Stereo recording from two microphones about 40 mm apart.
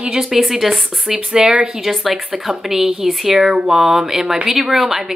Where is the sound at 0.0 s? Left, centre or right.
Centre.